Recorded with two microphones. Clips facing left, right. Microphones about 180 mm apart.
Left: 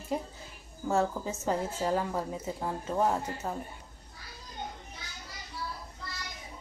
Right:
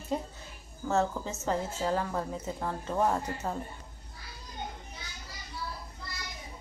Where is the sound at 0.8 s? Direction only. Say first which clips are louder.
Even; 10° left (ahead or behind).